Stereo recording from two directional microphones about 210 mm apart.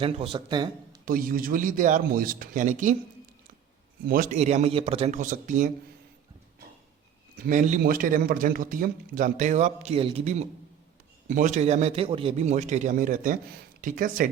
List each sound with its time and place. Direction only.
0.0 s a man's voice: 25° right (ahead or behind)
1.0 s a man's voice: 40° right (ahead or behind)
4.0 s a man's voice: 40° right (ahead or behind)
7.3 s a man's voice: 40° right (ahead or behind)